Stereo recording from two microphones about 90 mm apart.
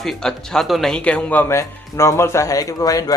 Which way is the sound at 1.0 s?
15° left (ahead or behind).